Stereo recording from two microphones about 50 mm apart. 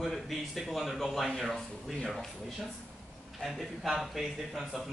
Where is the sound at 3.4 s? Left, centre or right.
Centre.